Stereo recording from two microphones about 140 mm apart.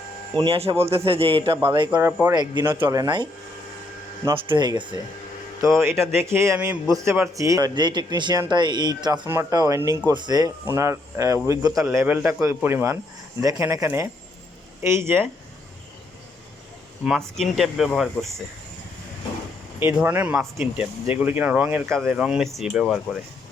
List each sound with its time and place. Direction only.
0.3 s speech: 40° right (ahead or behind)
2.0 s speech: 15° right (ahead or behind)
2.3 s speech: 30° right (ahead or behind)
4.4 s speech: 35° right (ahead or behind)
5.5 s speech: 20° right (ahead or behind)
11.9 s speech: 15° right (ahead or behind)
17.0 s speech: centre (ahead or behind)
19.8 s speech: 15° right (ahead or behind)